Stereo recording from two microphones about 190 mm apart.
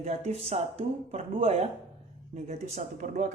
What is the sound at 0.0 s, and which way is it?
Speech, 35° right (ahead or behind).